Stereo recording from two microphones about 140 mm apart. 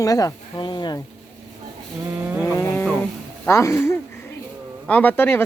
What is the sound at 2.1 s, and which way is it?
Vehicle, 10° right (ahead or behind).